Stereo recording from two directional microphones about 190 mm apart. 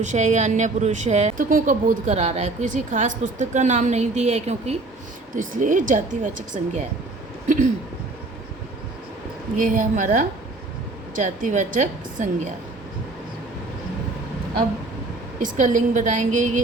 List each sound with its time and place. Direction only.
0.0 s a woman's voice: 40° right (ahead or behind)
7.4 s a sound: 45° right (ahead or behind)
9.6 s speech: 40° right (ahead or behind)
15.4 s speech: 40° right (ahead or behind)